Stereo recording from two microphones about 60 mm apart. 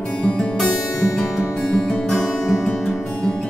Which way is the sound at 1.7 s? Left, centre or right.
Centre.